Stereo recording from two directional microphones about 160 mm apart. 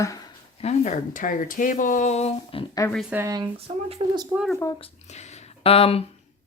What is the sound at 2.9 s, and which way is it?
Speech, centre (ahead or behind).